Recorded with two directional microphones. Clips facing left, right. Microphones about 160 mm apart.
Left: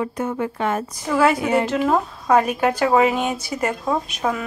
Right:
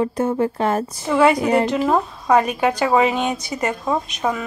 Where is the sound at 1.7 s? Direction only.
Centre (ahead or behind).